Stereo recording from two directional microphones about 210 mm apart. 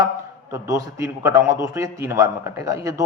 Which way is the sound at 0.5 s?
10° right (ahead or behind).